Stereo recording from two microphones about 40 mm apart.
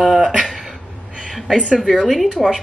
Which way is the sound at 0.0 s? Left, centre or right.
Centre.